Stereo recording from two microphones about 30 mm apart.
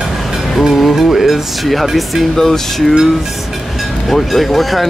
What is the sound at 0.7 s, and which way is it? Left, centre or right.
Music, centre.